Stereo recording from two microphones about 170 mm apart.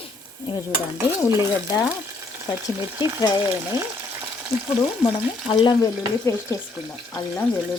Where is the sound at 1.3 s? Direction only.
20° left (ahead or behind).